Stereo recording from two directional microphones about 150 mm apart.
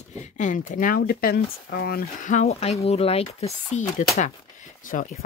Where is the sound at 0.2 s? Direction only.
55° left (ahead or behind); by 2.3 s 85° left.